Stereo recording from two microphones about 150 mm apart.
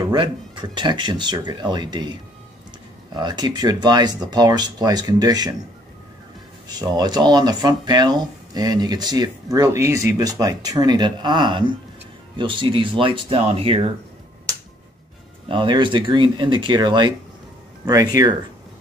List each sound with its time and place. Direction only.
0.1 s speech: 30° right (ahead or behind)
3.2 s speech: 30° right (ahead or behind)
6.8 s speech: 25° right (ahead or behind)
15.4 s speech: 35° right (ahead or behind)